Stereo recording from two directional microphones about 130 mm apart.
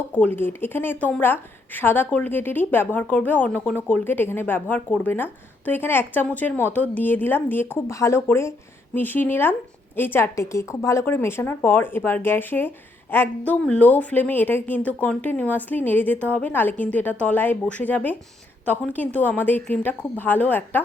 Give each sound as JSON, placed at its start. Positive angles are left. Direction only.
{"t": 0.3, "sound": "speech", "side_deg": 15}